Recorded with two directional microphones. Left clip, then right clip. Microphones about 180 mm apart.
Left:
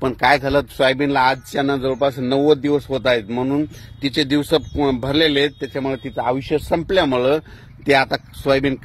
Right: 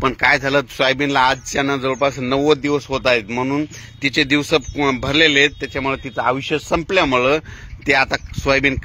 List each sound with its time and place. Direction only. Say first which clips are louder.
0.0 s speech: even; 25° left (ahead or behind)